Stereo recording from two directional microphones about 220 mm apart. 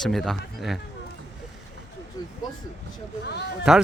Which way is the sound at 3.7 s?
5° right (ahead or behind).